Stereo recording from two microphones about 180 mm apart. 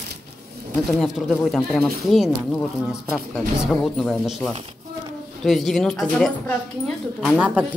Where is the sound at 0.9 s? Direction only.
Centre (ahead or behind).